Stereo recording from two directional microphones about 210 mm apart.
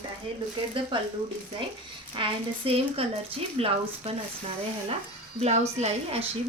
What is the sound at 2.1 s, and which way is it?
Speech, 25° right (ahead or behind).